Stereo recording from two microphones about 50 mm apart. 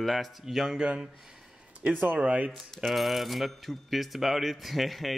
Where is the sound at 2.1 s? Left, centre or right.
Right.